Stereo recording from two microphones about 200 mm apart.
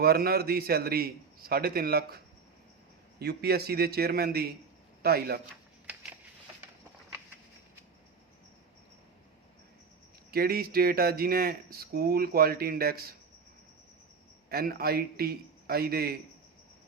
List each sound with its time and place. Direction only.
0.0 s speech: 50° right (ahead or behind)
10.3 s speech: 50° right (ahead or behind)
14.5 s speech: 50° right (ahead or behind)